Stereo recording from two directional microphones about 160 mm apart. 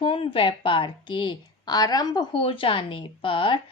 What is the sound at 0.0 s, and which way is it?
A woman's voice, 35° left (ahead or behind).